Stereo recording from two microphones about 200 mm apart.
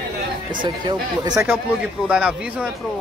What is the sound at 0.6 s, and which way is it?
Speech, 20° right (ahead or behind).